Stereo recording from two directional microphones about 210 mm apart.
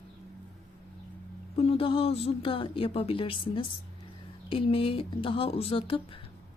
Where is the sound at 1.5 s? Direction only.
30° left (ahead or behind).